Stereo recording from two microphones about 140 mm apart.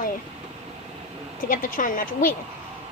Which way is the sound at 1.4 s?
75° left (ahead or behind).